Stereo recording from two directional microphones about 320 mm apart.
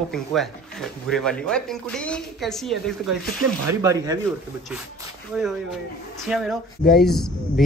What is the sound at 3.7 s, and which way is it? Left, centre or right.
Speech, centre.